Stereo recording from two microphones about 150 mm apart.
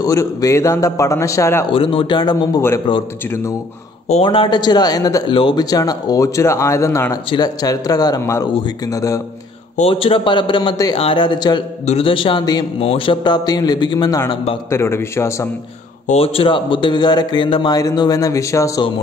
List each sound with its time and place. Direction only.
0.0 s speech: 20° left (ahead or behind)
1.7 s a man's voice: 35° left (ahead or behind)
4.1 s speech: 35° left (ahead or behind)
9.8 s a man's voice: 40° left (ahead or behind)
11.8 s a man's voice: 40° left (ahead or behind); by 15.5 s 20° left (ahead or behind)
16.1 s speech: 40° left (ahead or behind); by 18.9 s 20° left (ahead or behind)